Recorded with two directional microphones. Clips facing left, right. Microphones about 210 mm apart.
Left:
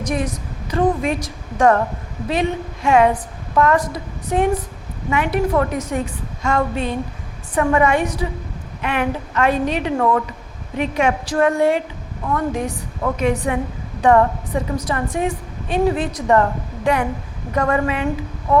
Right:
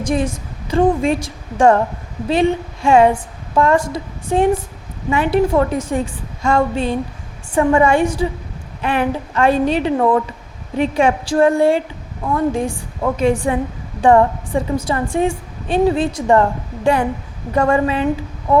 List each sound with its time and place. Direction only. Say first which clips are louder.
0.0 s a woman's voice: right 4 dB; 30° right (ahead or behind)